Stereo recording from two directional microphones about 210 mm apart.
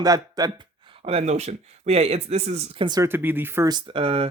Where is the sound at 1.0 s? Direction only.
30° right (ahead or behind).